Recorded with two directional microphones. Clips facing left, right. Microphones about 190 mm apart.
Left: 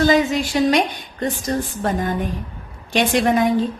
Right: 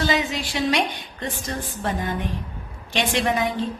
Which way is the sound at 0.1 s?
45° left (ahead or behind).